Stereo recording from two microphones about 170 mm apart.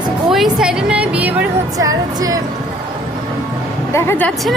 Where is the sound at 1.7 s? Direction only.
20° right (ahead or behind).